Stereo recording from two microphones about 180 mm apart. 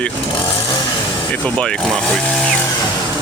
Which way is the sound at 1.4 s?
5° left (ahead or behind).